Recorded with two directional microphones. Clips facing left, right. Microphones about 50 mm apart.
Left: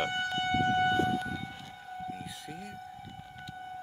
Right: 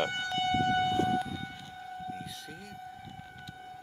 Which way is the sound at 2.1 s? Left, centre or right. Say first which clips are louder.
Left 1 dB; centre.